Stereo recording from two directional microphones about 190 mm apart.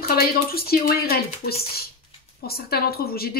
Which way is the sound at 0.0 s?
50° left (ahead or behind).